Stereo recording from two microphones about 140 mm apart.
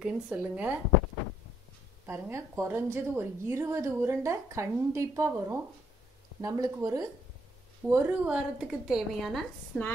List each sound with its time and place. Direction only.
0.0 s speech: 10° right (ahead or behind)
2.0 s a woman's voice: 15° right (ahead or behind)
7.9 s a woman's voice: 10° right (ahead or behind)